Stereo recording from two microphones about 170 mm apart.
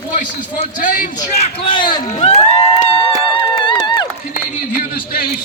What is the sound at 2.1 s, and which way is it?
Speech, 40° left (ahead or behind).